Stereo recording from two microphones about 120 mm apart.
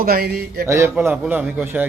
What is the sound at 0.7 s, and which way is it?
Speech, 20° right (ahead or behind).